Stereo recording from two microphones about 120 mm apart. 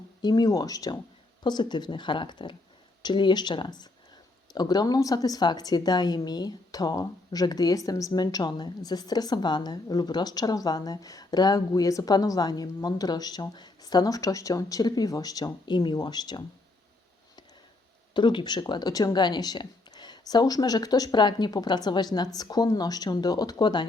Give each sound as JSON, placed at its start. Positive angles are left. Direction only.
{"t": 0.2, "sound": "a woman's voice", "side_deg": 35}
{"t": 18.1, "sound": "a woman's voice", "side_deg": 40}